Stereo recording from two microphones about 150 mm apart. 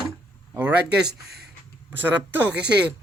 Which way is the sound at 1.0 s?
90° right.